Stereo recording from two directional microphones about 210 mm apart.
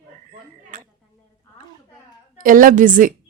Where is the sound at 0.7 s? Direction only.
40° right (ahead or behind).